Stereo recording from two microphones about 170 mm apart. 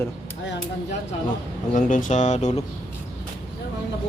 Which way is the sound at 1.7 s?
50° left (ahead or behind).